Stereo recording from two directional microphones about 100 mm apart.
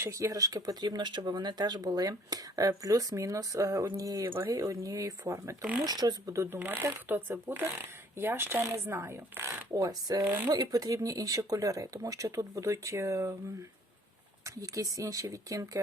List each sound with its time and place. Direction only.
0.0 s speech: 30° right (ahead or behind)
5.8 s speech: 45° right (ahead or behind); by 9.5 s 25° right (ahead or behind)
9.7 s speech: 40° right (ahead or behind)
10.2 s speech: 20° right (ahead or behind)
10.5 s speech: 40° right (ahead or behind)
14.4 s speech: 35° right (ahead or behind)